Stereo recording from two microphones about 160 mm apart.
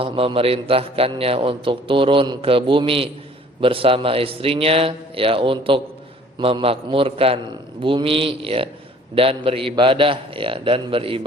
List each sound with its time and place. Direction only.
0.0 s a man's voice: 35° right (ahead or behind)